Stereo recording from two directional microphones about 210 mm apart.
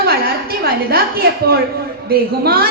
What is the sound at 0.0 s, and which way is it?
A woman's voice, 45° right (ahead or behind).